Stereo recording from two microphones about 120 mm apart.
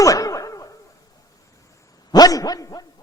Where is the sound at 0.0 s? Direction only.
30° left (ahead or behind).